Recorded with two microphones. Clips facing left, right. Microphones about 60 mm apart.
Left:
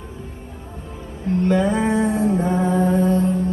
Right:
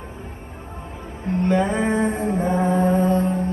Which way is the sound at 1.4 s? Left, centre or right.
Right.